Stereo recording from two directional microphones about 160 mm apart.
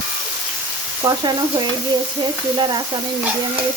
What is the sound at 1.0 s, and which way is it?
Frying, 25° right (ahead or behind).